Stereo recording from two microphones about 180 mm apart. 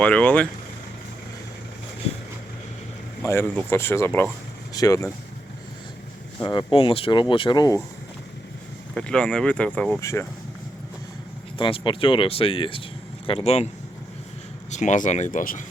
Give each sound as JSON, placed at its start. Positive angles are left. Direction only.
{"t": 0.0, "sound": "speech", "side_deg": 10}
{"t": 3.2, "sound": "speech", "side_deg": 15}
{"t": 6.4, "sound": "speech", "side_deg": 25}
{"t": 9.0, "sound": "speech", "side_deg": 5}
{"t": 11.5, "sound": "speech", "side_deg": 30}
{"t": 14.7, "sound": "speech", "side_deg": 40}